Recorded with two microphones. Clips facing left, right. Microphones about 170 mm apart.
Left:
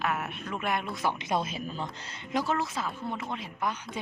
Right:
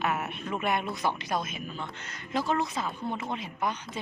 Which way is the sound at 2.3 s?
15° left (ahead or behind).